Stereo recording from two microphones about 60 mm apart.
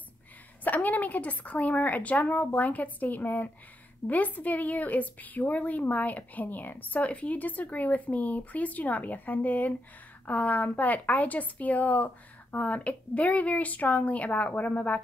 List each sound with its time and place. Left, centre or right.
0.7 s a woman's voice: left